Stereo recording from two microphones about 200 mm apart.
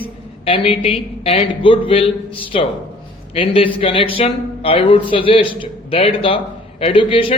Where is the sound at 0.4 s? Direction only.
25° left (ahead or behind).